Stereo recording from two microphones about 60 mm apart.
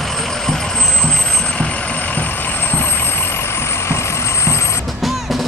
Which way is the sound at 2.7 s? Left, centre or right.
Left.